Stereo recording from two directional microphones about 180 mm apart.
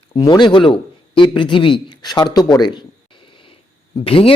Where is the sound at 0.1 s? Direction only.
25° left (ahead or behind).